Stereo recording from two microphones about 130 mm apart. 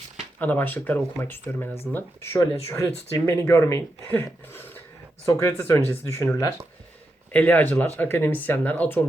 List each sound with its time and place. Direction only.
0.3 s speech: 10° left (ahead or behind)
7.3 s speech: 15° left (ahead or behind)